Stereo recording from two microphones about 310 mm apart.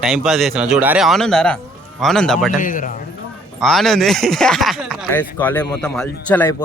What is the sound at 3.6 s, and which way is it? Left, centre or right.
A man's voice, centre.